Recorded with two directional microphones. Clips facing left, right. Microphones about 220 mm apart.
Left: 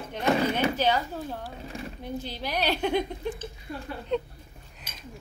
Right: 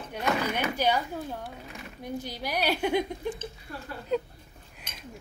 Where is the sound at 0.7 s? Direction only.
15° right (ahead or behind).